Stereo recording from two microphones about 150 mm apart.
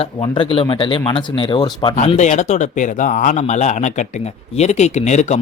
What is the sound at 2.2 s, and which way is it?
Speech, 50° left (ahead or behind).